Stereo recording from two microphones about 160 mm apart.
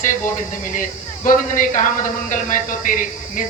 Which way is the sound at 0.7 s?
55° left (ahead or behind).